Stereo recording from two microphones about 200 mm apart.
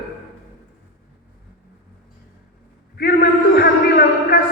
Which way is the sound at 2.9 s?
50° left (ahead or behind).